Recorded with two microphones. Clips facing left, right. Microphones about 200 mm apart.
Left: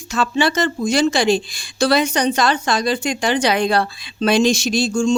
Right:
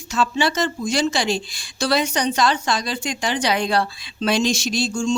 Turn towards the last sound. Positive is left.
turn(degrees=55)  # may be behind; listen again after turning